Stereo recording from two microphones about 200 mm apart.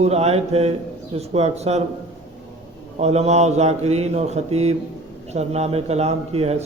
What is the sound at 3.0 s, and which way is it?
Speech, 35° right (ahead or behind).